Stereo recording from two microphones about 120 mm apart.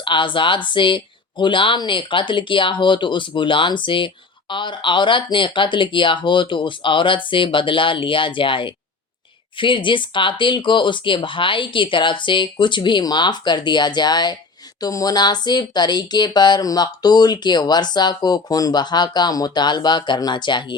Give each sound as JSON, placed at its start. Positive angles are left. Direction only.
{"t": 0.0, "sound": "speech", "side_deg": 45}